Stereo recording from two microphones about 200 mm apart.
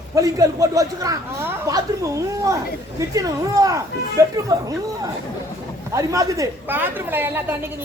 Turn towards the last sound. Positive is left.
turn(degrees=-10)  # may be behind; listen again after turning